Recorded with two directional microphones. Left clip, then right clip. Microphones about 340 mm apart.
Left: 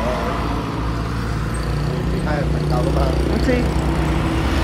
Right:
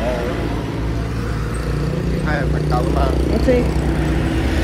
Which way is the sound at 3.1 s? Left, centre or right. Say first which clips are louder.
Right 3 dB; left.